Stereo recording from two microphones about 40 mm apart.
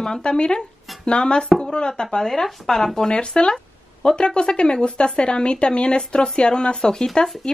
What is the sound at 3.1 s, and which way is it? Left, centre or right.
Speech, left.